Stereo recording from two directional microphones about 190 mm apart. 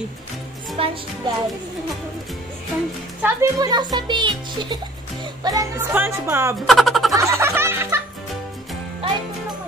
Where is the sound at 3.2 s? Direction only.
20° right (ahead or behind).